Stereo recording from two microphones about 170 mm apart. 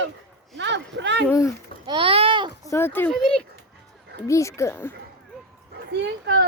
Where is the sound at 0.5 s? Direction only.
90° right.